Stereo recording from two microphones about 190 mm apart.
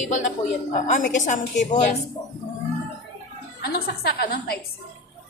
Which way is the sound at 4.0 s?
55° left (ahead or behind).